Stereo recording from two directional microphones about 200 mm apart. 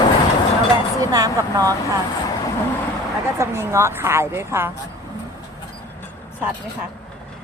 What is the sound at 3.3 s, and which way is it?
A woman's voice, 15° right (ahead or behind).